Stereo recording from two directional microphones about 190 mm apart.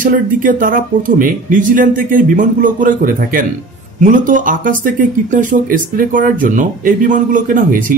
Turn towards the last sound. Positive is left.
turn(degrees=-45)  # may be behind; listen again after turning